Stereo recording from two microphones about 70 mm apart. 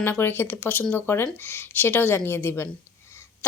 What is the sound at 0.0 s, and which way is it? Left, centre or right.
Speech, left.